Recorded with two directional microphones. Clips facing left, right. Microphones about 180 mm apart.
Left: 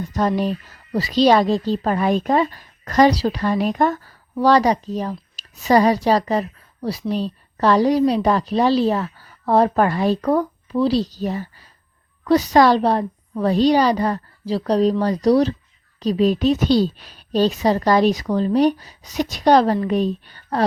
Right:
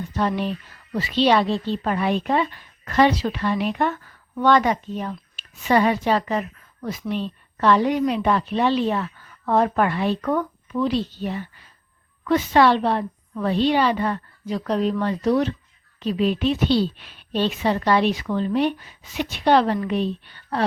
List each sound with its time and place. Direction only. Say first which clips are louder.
0.1 s speech: left 4 dB; 40° left (ahead or behind)